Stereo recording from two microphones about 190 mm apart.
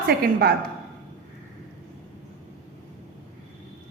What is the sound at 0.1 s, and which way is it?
Speech, 55° right (ahead or behind).